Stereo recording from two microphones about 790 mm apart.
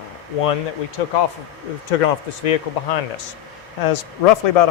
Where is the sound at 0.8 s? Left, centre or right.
Left.